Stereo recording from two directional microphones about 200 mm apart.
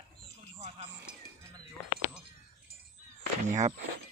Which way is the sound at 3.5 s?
35° right (ahead or behind).